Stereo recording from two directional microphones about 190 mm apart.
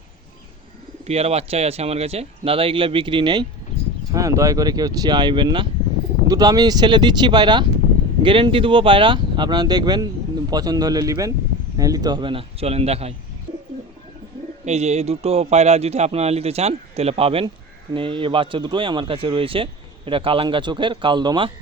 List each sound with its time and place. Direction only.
1.0 s a man's voice: 35° right (ahead or behind)
14.6 s a man's voice: 35° right (ahead or behind)